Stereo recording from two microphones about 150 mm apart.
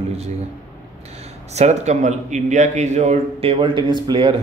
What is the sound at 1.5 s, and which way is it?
A man's voice, 50° right (ahead or behind).